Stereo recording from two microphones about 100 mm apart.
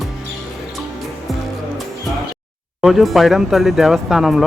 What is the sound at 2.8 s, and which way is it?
Speech, 5° right (ahead or behind).